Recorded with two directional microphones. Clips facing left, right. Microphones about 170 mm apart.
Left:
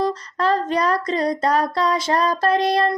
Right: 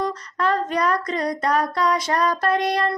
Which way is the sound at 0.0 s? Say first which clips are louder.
Left 3 dB; 30° left (ahead or behind).